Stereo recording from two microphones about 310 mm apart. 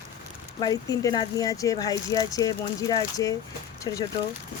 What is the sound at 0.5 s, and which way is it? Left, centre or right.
Speech, centre.